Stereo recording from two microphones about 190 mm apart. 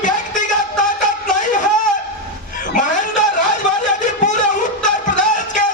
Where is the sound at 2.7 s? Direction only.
45° left (ahead or behind).